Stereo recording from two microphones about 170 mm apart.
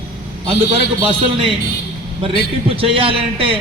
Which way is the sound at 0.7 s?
30° right (ahead or behind).